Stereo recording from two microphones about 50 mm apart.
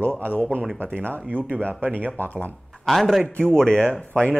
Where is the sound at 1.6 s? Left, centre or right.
Right.